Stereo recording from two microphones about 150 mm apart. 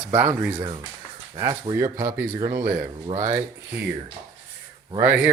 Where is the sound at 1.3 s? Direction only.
35° right (ahead or behind).